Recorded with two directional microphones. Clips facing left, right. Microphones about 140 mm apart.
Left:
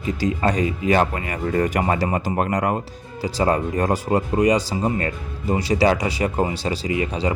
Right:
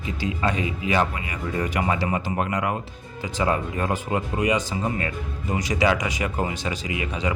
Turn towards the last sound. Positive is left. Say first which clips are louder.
# left 6 dB
turn(degrees=35)  # may be behind; listen again after turning